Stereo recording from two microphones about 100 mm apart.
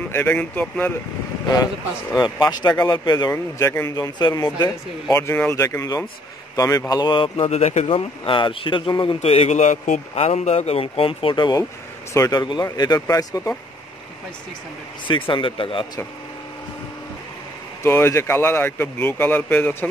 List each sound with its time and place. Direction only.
0.1 s speech: 20° left (ahead or behind)
2.3 s a man's voice: 45° left (ahead or behind)
5.1 s a man's voice: 25° left (ahead or behind)
6.9 s speech: 50° left (ahead or behind)
7.4 s speech: 90° left
10.1 s speech: 90° left; by 11.6 s 50° left (ahead or behind)
12.1 s a man's voice: 35° left (ahead or behind)
15.0 s speech: 55° left (ahead or behind)
17.8 s speech: 25° left (ahead or behind)